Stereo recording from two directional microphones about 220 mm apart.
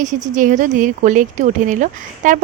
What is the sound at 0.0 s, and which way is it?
Speech, 35° right (ahead or behind).